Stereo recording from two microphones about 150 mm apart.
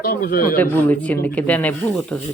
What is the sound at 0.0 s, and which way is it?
Speech, 90° left.